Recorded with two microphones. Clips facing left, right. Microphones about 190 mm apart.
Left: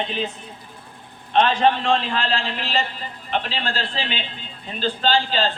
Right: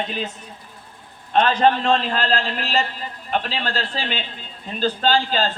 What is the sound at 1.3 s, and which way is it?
A man's voice, 40° right (ahead or behind).